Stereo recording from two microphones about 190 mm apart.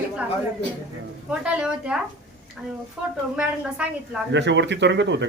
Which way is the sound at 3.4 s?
5° right (ahead or behind).